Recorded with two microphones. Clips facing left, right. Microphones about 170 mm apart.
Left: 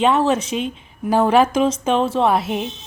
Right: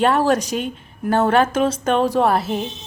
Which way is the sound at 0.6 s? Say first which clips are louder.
Left 1 dB; centre (ahead or behind).